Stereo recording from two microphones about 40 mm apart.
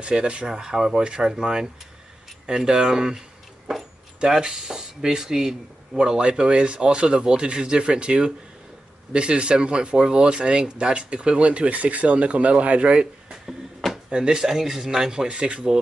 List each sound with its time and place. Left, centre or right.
0.0 s speech: right
0.5 s speech: centre